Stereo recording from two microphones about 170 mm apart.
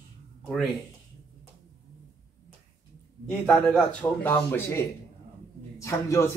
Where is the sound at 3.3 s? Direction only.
5° left (ahead or behind).